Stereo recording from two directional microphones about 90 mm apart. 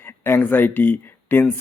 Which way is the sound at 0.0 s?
25° left (ahead or behind).